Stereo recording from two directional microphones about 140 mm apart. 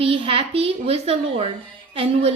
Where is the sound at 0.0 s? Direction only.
40° right (ahead or behind).